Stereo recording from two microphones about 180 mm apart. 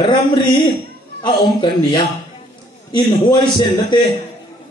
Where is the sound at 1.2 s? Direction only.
25° left (ahead or behind).